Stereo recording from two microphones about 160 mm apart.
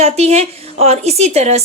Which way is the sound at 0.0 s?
40° right (ahead or behind).